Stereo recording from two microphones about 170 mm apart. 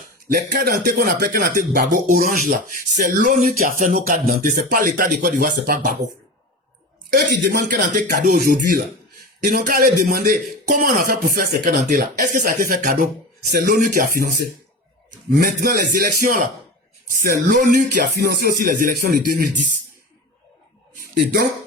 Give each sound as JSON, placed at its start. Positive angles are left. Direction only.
{"t": 0.3, "sound": "speech", "side_deg": -60}
{"t": 7.1, "sound": "a man's voice", "side_deg": -60}
{"t": 15.4, "sound": "a man's voice", "side_deg": -60}
{"t": 20.9, "sound": "a sound", "side_deg": -60}